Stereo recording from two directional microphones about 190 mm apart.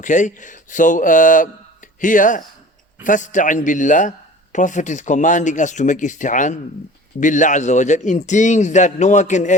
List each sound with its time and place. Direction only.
0.0 s speech: 40° left (ahead or behind)